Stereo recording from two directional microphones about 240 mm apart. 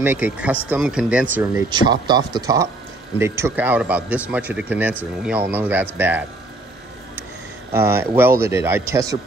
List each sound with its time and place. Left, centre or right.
0.0 s a man's voice: centre
7.7 s a man's voice: centre